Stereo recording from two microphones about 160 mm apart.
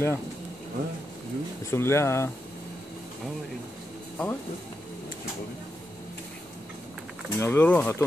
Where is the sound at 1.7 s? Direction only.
15° left (ahead or behind).